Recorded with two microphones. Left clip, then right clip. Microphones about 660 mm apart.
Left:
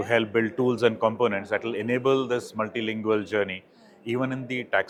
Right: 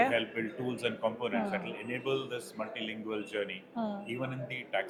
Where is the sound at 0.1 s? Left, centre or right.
Left.